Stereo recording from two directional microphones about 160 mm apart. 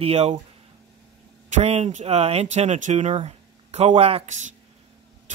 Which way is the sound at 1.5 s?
40° right (ahead or behind).